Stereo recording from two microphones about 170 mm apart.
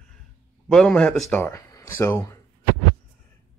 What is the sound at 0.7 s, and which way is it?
Speech, 5° left (ahead or behind).